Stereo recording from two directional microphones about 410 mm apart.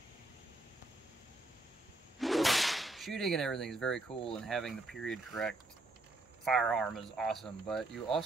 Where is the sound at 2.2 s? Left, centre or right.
Centre.